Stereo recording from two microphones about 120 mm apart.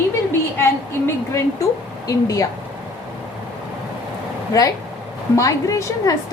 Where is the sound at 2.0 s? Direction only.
30° left (ahead or behind).